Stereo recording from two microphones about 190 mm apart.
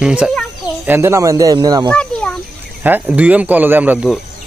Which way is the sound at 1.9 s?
5° left (ahead or behind).